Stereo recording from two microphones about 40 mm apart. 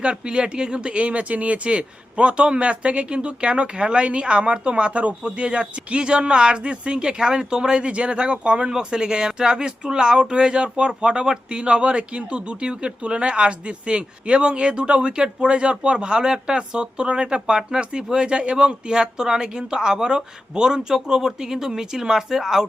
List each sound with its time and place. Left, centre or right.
0.0 s speech: right